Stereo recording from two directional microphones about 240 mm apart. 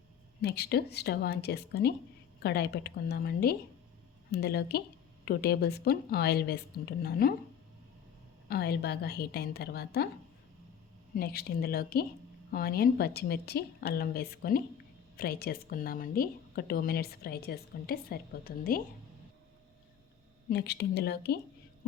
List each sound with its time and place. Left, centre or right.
0.4 s speech: left
8.4 s speech: left
11.1 s speech: left
20.5 s speech: left